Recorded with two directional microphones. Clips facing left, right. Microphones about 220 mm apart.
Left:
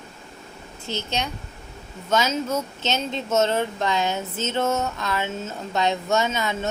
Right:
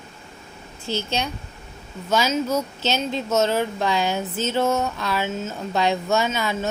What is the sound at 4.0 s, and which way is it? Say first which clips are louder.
Speech: right 2 dB; 20° left (ahead or behind).